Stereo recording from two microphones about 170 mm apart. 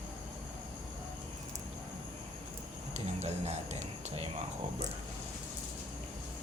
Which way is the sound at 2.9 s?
40° right (ahead or behind).